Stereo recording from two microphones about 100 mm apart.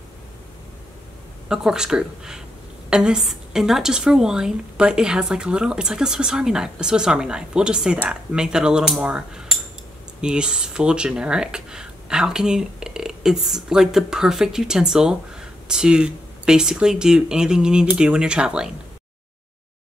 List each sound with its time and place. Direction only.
1.5 s speech: 5° right (ahead or behind)